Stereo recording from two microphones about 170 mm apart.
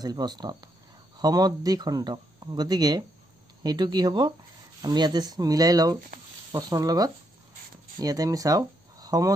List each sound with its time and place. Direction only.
0.0 s speech: 25° right (ahead or behind)